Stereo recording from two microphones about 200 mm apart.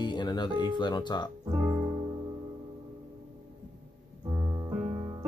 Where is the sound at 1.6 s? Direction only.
15° right (ahead or behind).